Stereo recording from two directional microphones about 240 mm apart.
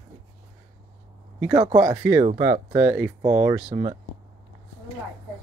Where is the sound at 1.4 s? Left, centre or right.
Centre.